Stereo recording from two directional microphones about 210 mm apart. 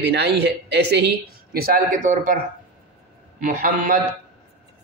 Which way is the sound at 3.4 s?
40° right (ahead or behind).